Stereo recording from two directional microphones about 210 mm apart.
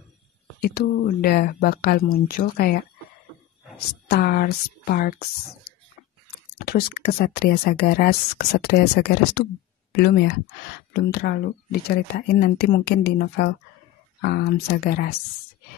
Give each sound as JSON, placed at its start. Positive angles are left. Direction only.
{"t": 0.6, "sound": "speech", "side_deg": 50}
{"t": 4.1, "sound": "speech", "side_deg": 45}
{"t": 6.6, "sound": "speech", "side_deg": 45}